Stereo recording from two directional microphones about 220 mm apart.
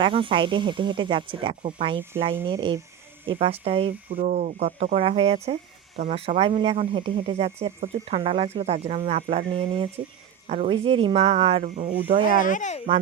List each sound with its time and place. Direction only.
0.0 s speech: 25° right (ahead or behind)
12.4 s speech: 35° left (ahead or behind)